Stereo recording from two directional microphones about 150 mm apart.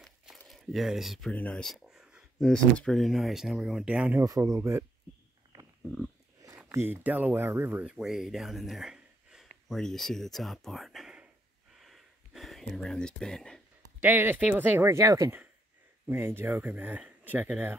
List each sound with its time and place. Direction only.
0.5 s speech: centre (ahead or behind)
4.2 s speech: 20° right (ahead or behind)
6.7 s speech: 15° right (ahead or behind)
11.8 s a sound: centre (ahead or behind)
14.0 s speech: 15° right (ahead or behind)